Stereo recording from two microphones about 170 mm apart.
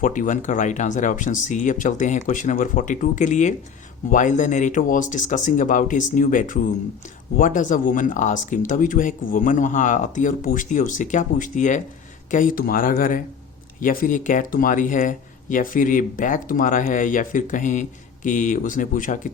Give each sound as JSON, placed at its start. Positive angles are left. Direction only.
{"t": 0.0, "sound": "speech", "side_deg": 50}